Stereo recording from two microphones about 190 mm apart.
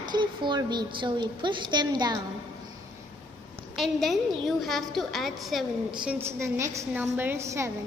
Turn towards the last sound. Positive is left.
turn(degrees=-15)  # may be behind; listen again after turning